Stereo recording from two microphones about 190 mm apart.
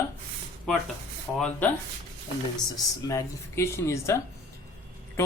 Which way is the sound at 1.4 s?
10° left (ahead or behind).